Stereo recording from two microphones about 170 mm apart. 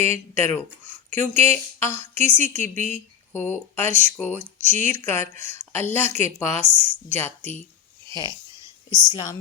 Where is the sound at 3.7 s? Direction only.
10° left (ahead or behind).